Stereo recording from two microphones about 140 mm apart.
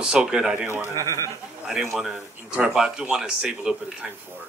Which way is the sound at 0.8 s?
20° left (ahead or behind).